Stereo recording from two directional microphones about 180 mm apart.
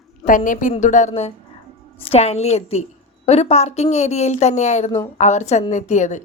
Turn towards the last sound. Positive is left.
turn(degrees=40)  # may be behind; listen again after turning